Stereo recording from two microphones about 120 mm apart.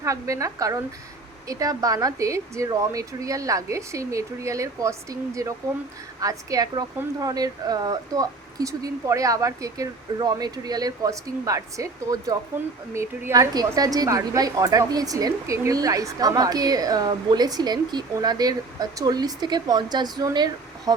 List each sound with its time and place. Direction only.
0.0 s a woman's voice: 25° right (ahead or behind)